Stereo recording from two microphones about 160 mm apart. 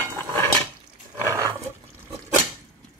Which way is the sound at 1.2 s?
20° right (ahead or behind).